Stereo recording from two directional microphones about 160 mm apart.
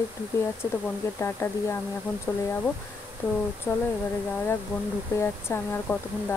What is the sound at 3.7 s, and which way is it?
Speech, 15° left (ahead or behind).